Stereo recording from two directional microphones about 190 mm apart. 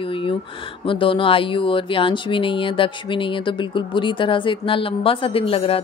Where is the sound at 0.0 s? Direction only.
25° left (ahead or behind).